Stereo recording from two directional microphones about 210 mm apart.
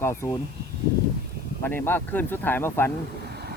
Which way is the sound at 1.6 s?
10° left (ahead or behind).